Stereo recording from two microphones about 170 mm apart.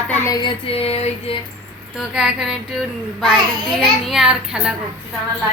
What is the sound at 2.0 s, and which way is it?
Speech, 5° right (ahead or behind).